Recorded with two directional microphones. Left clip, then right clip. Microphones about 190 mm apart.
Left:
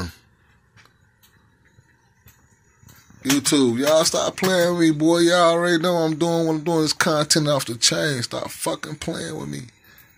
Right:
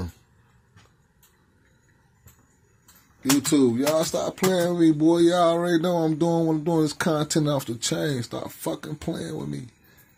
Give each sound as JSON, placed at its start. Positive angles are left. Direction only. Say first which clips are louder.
{"t": 3.2, "sound": "speech", "louder": "left 2 dB", "side_deg": 0}